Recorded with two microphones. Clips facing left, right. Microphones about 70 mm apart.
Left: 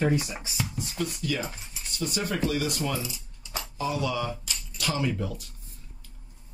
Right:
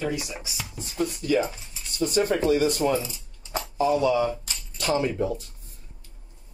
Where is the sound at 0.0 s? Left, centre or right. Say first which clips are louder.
Left 3 dB; left.